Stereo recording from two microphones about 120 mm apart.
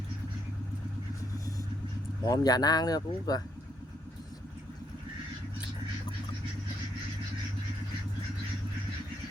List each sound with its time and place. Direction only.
2.2 s speech: 35° left (ahead or behind)